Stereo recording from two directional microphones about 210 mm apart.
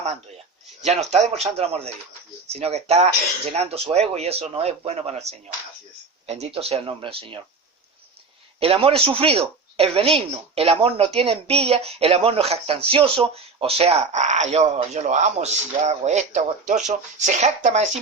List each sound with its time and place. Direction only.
0.9 s a woman's voice: 30° right (ahead or behind)
8.6 s a woman's voice: 25° right (ahead or behind)